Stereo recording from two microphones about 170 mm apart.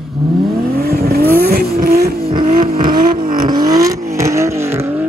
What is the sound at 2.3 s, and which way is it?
Vehicle, 35° right (ahead or behind).